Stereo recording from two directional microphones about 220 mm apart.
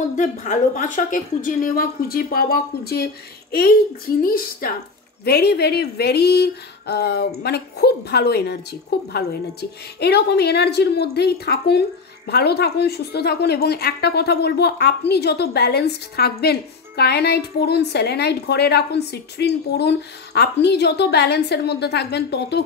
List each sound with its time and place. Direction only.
0.2 s speech: 35° left (ahead or behind)
4.2 s speech: 40° left (ahead or behind)